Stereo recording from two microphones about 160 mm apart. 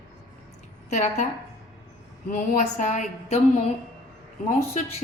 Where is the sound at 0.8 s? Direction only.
50° left (ahead or behind).